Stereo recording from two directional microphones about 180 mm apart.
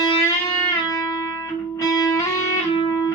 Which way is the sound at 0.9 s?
20° left (ahead or behind).